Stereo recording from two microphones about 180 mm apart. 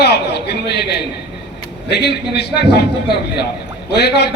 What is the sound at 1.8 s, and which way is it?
A man's voice, 65° left (ahead or behind).